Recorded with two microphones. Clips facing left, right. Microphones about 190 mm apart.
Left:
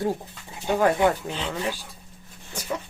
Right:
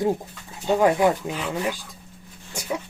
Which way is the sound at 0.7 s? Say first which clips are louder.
Right 2 dB; 15° right (ahead or behind).